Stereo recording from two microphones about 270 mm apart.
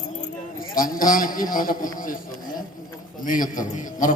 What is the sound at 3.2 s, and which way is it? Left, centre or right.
Speech, left.